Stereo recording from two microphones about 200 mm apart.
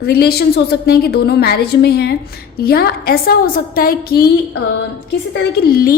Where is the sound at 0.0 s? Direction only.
50° left (ahead or behind).